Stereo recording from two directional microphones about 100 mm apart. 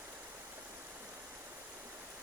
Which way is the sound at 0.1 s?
25° right (ahead or behind).